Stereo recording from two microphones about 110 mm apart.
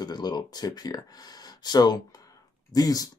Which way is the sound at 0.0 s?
40° left (ahead or behind).